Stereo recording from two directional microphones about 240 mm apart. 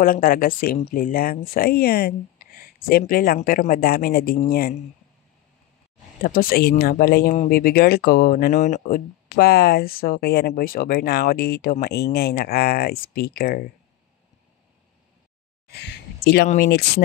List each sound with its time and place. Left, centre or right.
0.0 s speech: left
6.2 s speech: left
16.4 s speech: left